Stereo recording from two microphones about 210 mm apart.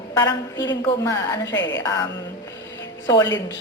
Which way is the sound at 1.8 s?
15° left (ahead or behind).